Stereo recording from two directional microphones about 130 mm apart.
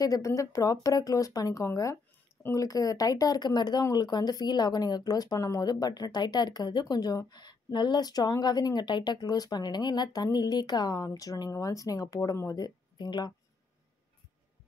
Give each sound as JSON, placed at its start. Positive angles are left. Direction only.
{"t": 0.0, "sound": "speech", "side_deg": 25}